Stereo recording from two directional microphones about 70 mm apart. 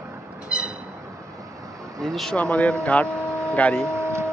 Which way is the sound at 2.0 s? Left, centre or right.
Centre.